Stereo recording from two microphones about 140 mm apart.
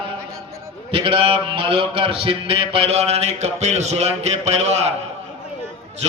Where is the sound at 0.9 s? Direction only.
35° right (ahead or behind).